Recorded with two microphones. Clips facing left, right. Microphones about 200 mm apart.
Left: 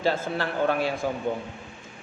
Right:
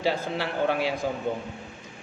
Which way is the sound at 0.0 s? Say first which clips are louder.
Left 1 dB; 15° right (ahead or behind).